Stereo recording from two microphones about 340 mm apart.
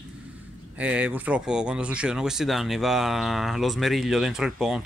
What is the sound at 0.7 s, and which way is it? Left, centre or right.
Speech, centre.